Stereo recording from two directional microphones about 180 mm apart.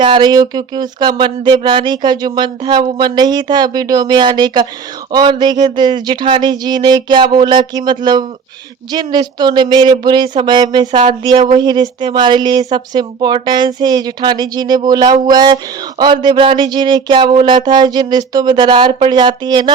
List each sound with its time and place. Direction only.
0.0 s speech: 25° right (ahead or behind)